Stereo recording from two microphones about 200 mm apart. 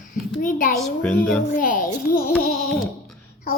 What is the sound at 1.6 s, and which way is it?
Speech, 45° left (ahead or behind).